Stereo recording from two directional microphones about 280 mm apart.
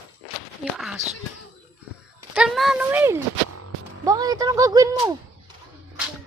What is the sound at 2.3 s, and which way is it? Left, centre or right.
Speech, centre.